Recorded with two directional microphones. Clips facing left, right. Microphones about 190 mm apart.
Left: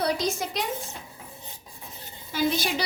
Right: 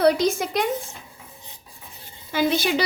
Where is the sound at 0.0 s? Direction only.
55° right (ahead or behind).